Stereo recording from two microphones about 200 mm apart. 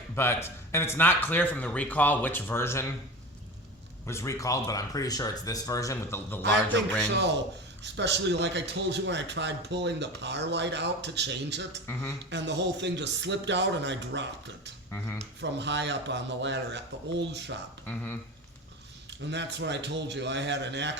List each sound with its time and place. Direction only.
0.2 s speech: 10° left (ahead or behind)
4.0 s speech: 15° left (ahead or behind)
6.4 s a man's voice: 60° right (ahead or behind)
11.9 s speech: 10° left (ahead or behind)
12.3 s a man's voice: 60° right (ahead or behind)
14.9 s speech: 10° left (ahead or behind)
15.4 s a man's voice: 60° right (ahead or behind)
17.8 s speech: 10° left (ahead or behind)
19.3 s a man's voice: 60° right (ahead or behind)